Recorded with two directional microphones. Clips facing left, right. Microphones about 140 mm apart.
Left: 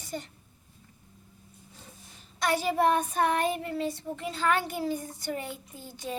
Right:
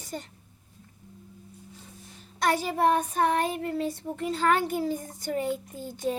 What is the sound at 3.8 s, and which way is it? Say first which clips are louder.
A child's voice: right 2 dB; 45° right (ahead or behind).